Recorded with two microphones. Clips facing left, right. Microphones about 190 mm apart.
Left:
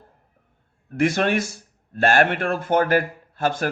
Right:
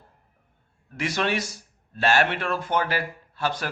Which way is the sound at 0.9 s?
50° left (ahead or behind).